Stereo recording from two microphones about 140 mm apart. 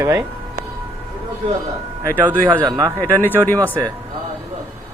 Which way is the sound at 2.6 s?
25° right (ahead or behind).